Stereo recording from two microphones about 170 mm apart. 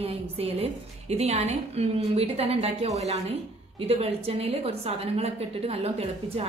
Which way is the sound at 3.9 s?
35° right (ahead or behind).